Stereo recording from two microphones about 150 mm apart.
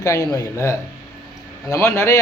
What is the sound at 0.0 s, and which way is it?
Speech, 20° left (ahead or behind).